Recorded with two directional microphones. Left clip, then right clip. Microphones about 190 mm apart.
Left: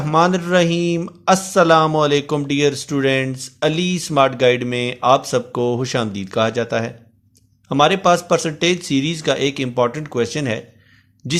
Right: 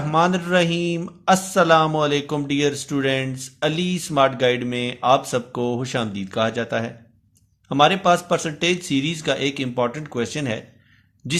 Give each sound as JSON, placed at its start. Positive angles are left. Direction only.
{"t": 0.1, "sound": "speech", "side_deg": 25}